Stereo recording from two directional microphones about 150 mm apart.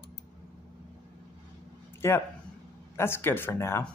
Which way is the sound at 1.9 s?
15° left (ahead or behind).